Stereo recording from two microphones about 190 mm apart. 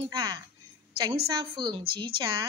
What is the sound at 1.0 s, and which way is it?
Speech, 20° right (ahead or behind).